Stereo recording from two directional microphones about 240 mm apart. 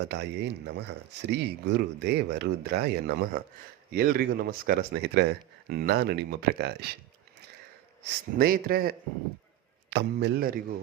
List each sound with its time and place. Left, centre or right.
0.1 s speech: right
8.0 s speech: right